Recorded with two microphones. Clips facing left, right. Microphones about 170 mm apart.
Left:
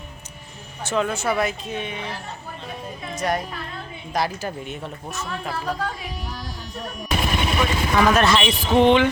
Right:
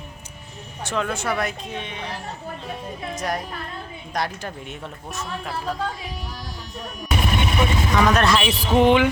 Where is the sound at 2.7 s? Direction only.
Centre (ahead or behind).